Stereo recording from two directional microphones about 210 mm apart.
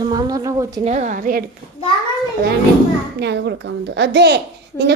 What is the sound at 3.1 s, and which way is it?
A child's voice, 55° right (ahead or behind).